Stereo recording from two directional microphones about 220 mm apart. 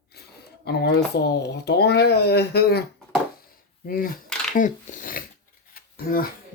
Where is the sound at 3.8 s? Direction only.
40° left (ahead or behind).